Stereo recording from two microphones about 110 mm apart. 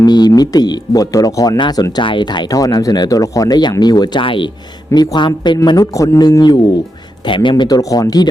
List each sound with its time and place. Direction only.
0.0 s speech: 40° left (ahead or behind)
5.6 s speech: 30° left (ahead or behind)
7.3 s speech: 50° left (ahead or behind)
7.5 s speech: 35° left (ahead or behind)